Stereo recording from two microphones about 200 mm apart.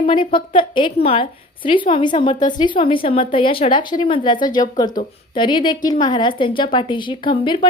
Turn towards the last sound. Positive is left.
turn(degrees=25)  # may be behind; listen again after turning